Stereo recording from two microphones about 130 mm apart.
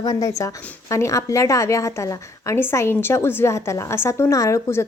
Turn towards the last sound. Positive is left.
turn(degrees=25)  # may be behind; listen again after turning